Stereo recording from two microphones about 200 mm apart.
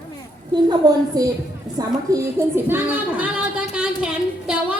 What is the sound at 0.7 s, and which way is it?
A woman's voice, 20° right (ahead or behind).